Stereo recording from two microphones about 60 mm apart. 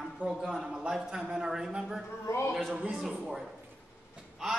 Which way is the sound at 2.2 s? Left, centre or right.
Left.